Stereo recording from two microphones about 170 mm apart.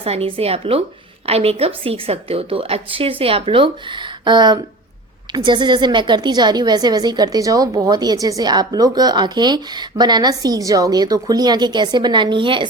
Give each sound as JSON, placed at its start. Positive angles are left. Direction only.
{"t": 0.0, "sound": "a woman's voice", "side_deg": -35}